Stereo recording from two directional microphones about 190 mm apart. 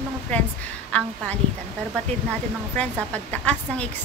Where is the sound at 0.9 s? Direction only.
5° left (ahead or behind).